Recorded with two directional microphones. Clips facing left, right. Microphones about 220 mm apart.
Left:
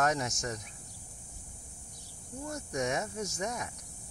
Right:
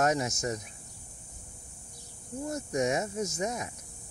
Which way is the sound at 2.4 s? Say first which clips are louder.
Right 5 dB; 25° right (ahead or behind).